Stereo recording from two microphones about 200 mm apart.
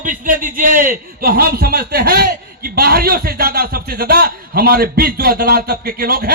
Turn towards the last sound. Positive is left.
turn(degrees=-50)  # may be behind; listen again after turning